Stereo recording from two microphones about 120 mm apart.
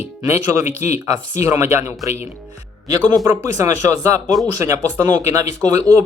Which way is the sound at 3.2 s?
25° right (ahead or behind).